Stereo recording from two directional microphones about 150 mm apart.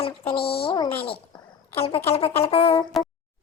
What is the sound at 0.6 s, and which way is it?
Speech, 35° left (ahead or behind).